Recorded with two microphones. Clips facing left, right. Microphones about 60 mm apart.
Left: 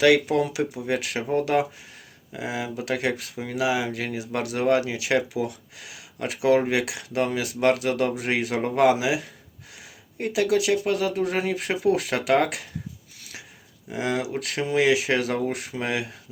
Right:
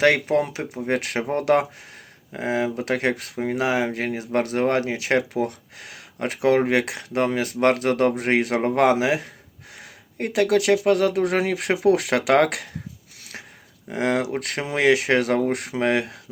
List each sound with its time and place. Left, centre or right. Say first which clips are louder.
0.0 s speech: even; right
9.7 s a sound: right 3 dB; right
10.8 s speech: right 5 dB; right
13.9 s speech: right 4 dB; right